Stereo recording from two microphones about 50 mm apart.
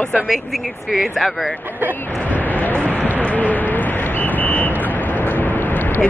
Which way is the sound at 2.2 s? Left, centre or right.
Left.